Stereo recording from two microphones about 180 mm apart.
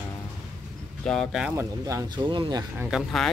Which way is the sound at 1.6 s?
15° right (ahead or behind).